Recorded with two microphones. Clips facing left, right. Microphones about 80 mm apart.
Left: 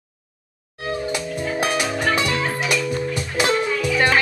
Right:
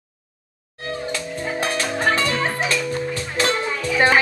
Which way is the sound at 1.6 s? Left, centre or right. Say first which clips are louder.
Even; centre.